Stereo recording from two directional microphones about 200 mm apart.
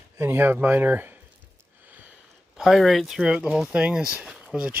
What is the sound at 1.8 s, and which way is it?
Speech, 10° right (ahead or behind).